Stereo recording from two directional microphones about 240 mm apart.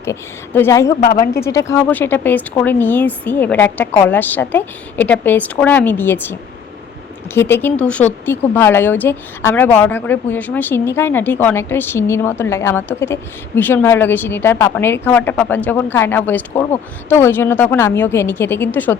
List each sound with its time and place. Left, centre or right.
0.0 s speech: centre
7.3 s speech: centre